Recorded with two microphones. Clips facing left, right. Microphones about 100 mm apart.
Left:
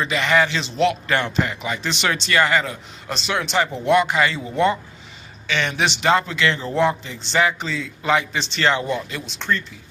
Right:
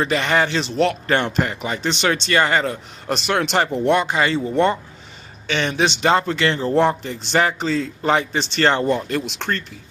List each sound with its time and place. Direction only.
0.0 s speech: 35° right (ahead or behind)
3.1 s speech: 55° right (ahead or behind)
4.0 s speech: 30° right (ahead or behind); by 9.6 s 60° right (ahead or behind)